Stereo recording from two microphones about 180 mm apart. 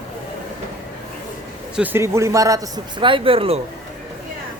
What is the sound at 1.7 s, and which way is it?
A man's voice, 10° right (ahead or behind).